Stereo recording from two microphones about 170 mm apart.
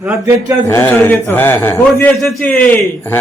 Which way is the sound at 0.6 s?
15° left (ahead or behind).